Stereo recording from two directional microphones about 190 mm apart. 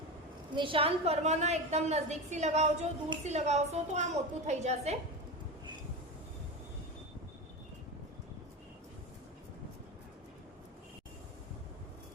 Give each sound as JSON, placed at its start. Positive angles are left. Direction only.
{"t": 0.5, "sound": "a woman's voice", "side_deg": -25}